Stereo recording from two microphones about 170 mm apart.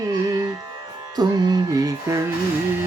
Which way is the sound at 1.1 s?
25° right (ahead or behind).